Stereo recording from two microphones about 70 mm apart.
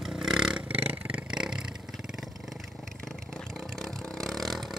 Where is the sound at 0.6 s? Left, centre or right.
Right.